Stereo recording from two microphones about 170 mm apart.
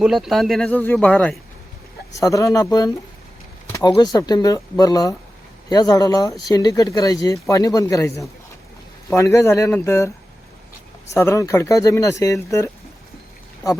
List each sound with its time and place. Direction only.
0.0 s speech: centre (ahead or behind)
2.1 s speech: 20° left (ahead or behind)
11.1 s speech: 15° left (ahead or behind)